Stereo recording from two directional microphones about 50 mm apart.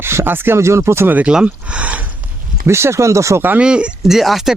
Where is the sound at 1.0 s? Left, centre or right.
Right.